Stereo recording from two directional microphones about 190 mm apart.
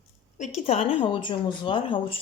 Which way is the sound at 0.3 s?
35° left (ahead or behind).